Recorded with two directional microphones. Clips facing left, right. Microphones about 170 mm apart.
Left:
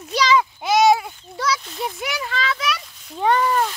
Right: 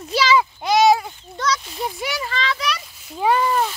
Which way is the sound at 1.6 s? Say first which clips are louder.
Right 1 dB; 5° right (ahead or behind).